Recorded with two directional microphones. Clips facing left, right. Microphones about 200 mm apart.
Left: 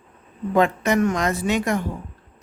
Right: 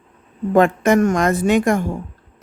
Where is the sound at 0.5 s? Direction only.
50° right (ahead or behind).